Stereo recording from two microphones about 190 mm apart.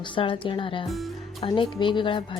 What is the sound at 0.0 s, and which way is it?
Speech, 25° left (ahead or behind).